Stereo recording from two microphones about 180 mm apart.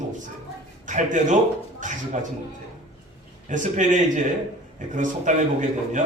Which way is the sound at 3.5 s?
45° right (ahead or behind).